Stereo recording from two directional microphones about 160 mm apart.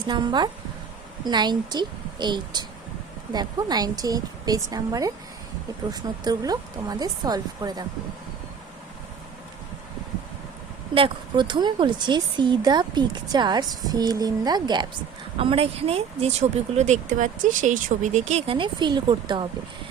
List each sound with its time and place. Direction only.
0.1 s speech: 30° right (ahead or behind)
10.9 s speech: 30° right (ahead or behind)